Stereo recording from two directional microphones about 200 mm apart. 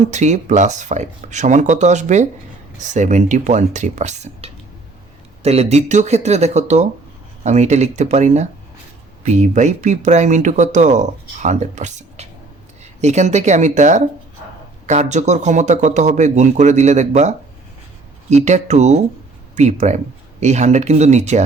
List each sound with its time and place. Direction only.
0.1 s speech: 35° right (ahead or behind)